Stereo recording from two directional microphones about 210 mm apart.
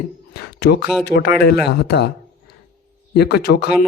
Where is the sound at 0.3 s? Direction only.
50° left (ahead or behind).